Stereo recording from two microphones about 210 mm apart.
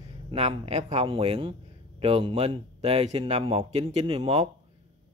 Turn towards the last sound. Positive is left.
turn(degrees=-30)  # may be behind; listen again after turning